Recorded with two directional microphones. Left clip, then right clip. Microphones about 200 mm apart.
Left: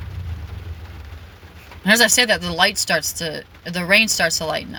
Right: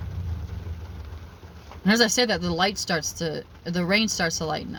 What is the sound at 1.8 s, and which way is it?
Speech, 15° right (ahead or behind).